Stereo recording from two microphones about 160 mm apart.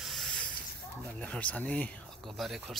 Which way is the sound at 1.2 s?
10° left (ahead or behind).